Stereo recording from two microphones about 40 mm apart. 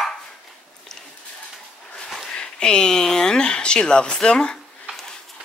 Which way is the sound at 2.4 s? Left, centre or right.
Left.